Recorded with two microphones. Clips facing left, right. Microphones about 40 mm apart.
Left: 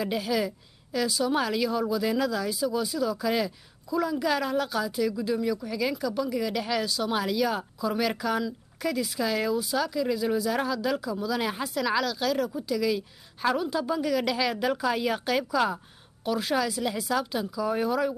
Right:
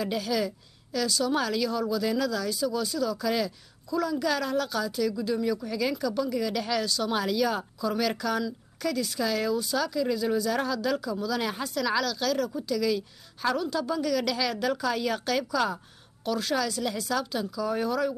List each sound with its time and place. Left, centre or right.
0.0 s speech: centre